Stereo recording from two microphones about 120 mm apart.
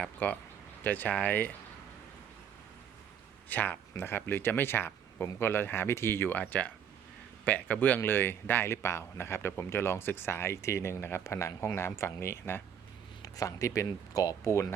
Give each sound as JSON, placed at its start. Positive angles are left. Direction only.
{"t": 0.2, "sound": "speech", "side_deg": 15}
{"t": 3.5, "sound": "speech", "side_deg": 15}